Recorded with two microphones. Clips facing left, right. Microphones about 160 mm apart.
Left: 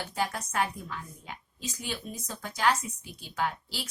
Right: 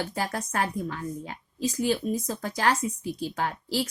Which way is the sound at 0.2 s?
50° right (ahead or behind).